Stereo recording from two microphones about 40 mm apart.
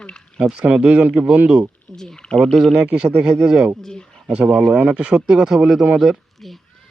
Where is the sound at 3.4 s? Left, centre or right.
Centre.